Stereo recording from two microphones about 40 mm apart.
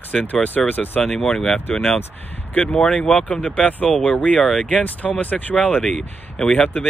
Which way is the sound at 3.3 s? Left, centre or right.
Left.